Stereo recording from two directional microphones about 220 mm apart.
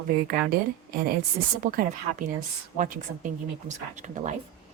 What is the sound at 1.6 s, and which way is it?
Speech, 35° right (ahead or behind).